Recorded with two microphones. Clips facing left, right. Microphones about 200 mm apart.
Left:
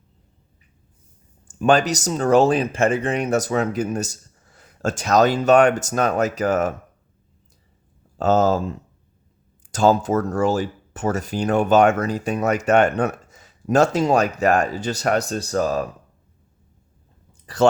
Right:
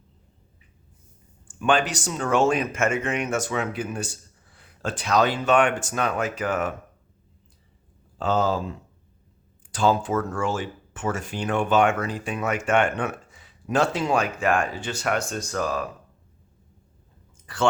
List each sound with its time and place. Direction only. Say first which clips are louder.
1.5 s speech: left 5 dB; 40° left (ahead or behind)
8.2 s speech: left 6 dB; 45° left (ahead or behind)
9.7 s speech: left 5 dB; 40° left (ahead or behind)
17.4 s clicking: left 7 dB; 40° left (ahead or behind)